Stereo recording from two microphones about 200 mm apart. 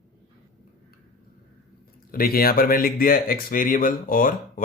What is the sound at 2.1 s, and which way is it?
Speech, 45° left (ahead or behind).